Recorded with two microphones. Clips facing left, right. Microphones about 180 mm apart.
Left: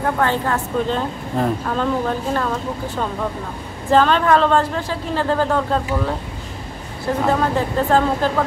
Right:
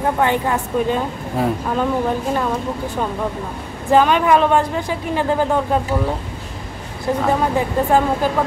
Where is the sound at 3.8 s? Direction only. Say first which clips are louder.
Right 1 dB; 15° right (ahead or behind).